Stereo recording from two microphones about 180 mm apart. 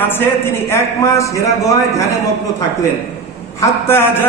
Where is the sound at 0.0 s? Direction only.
15° left (ahead or behind).